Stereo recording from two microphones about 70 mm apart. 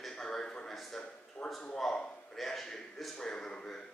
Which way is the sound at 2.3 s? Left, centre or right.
Centre.